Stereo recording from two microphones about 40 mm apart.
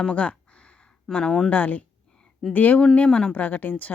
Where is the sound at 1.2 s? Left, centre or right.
Centre.